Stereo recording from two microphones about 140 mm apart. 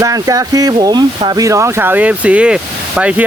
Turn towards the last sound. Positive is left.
turn(degrees=-10)  # may be behind; listen again after turning